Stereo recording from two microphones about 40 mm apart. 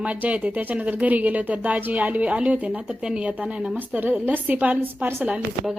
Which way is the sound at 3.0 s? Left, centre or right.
Right.